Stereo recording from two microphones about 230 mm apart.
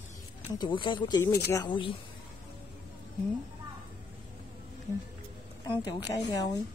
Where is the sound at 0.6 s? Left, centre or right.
Centre.